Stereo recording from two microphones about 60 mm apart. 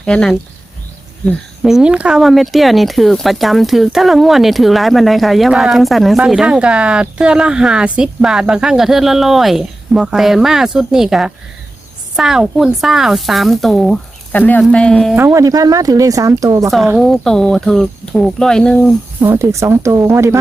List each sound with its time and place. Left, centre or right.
0.0 s speech: centre
1.6 s speech: centre
2.2 s speech: centre
6.2 s speech: centre
14.3 s speech: left
14.7 s speech: centre
15.3 s speech: right
17.0 s speech: centre
19.2 s speech: right